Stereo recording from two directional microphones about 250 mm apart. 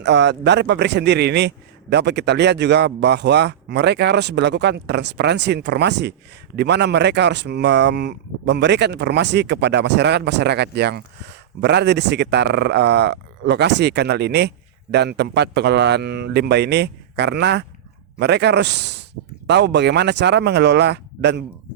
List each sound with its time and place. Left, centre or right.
0.0 s a man's voice: right